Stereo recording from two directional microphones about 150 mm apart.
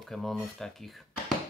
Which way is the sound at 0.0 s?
Centre (ahead or behind).